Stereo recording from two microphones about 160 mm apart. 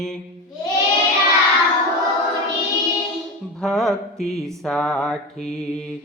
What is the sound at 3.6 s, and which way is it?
Music, centre (ahead or behind).